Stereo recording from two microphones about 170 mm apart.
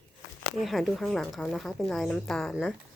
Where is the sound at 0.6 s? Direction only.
Centre (ahead or behind).